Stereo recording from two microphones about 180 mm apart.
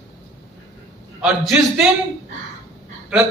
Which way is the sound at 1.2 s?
5° right (ahead or behind).